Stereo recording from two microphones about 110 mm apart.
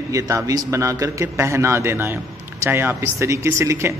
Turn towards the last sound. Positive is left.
turn(degrees=-25)  # may be behind; listen again after turning